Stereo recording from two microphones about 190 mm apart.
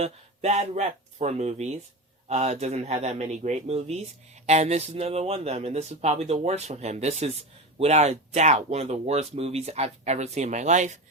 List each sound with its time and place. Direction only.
0.0 s speech: 35° right (ahead or behind)